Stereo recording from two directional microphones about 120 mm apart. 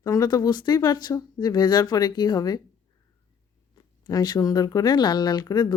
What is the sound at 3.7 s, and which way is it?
Speech, 30° left (ahead or behind).